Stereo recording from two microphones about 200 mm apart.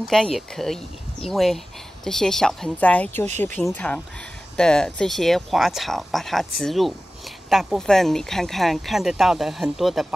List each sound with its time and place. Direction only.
0.1 s speech: centre (ahead or behind)
3.3 s speech: 35° right (ahead or behind)
3.5 s speech: 5° left (ahead or behind)